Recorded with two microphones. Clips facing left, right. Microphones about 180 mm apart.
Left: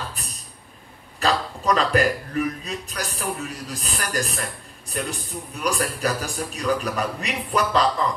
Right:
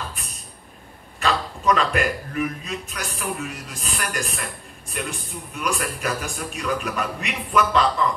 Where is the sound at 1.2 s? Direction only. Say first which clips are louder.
Even; 35° left (ahead or behind).